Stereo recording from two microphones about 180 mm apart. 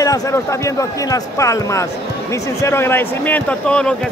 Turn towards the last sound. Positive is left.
turn(degrees=5)  # may be behind; listen again after turning